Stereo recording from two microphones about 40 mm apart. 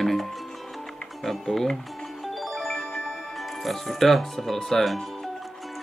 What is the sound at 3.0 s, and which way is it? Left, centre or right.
Speech, centre.